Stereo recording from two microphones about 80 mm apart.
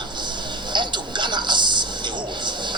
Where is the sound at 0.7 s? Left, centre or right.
Right.